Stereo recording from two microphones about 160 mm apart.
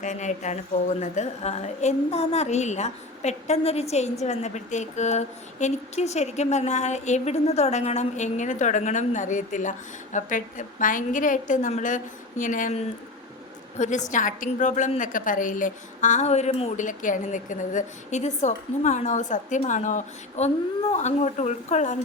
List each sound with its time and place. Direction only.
0.0 s a woman's voice: 50° left (ahead or behind)
16.7 s a woman's voice: 55° left (ahead or behind)